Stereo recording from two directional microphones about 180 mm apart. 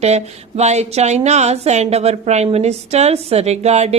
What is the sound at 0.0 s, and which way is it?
A woman's voice, 35° right (ahead or behind).